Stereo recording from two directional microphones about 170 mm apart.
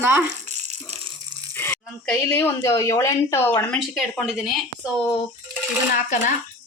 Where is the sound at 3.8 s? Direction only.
Centre (ahead or behind).